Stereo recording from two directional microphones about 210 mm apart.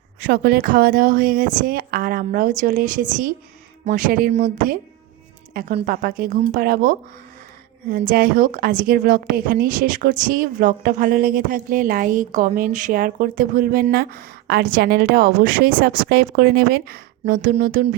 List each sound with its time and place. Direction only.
0.2 s a woman's voice: 45° right (ahead or behind)
8.0 s a woman's voice: 45° right (ahead or behind)